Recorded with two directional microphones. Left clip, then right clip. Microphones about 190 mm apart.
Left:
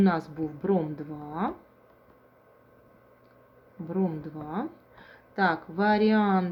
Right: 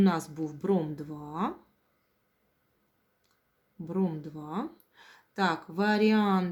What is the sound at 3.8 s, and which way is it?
Speech, 20° right (ahead or behind).